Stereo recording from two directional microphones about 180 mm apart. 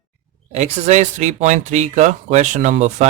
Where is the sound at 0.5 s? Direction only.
40° right (ahead or behind).